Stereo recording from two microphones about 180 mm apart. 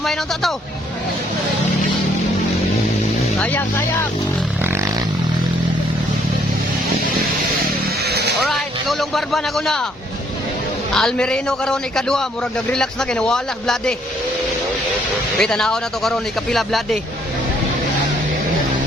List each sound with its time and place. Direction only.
0.0 s a man's voice: centre (ahead or behind)
3.4 s speech: 10° left (ahead or behind)
8.0 s vehicle: 65° right (ahead or behind)
8.4 s speech: centre (ahead or behind)
10.9 s a man's voice: 5° left (ahead or behind)
15.4 s a man's voice: 5° left (ahead or behind)